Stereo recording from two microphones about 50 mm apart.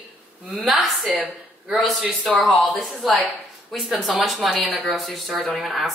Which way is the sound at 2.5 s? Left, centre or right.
Left.